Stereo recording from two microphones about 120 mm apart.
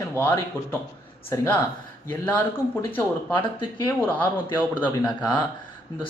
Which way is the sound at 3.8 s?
20° left (ahead or behind).